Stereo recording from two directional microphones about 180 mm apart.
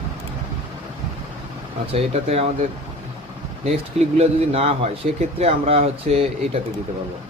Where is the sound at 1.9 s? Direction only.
35° right (ahead or behind).